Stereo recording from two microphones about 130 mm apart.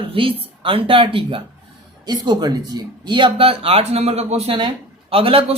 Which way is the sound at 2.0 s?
35° right (ahead or behind).